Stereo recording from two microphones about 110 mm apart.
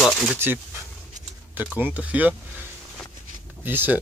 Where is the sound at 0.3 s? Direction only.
20° right (ahead or behind).